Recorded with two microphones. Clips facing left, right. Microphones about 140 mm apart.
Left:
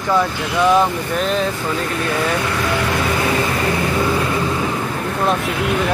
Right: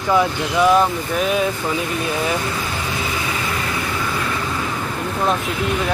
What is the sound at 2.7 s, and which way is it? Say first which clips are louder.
Music: left 6 dB; 75° left (ahead or behind).